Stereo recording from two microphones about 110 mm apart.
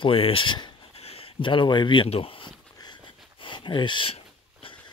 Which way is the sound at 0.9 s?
65° left (ahead or behind).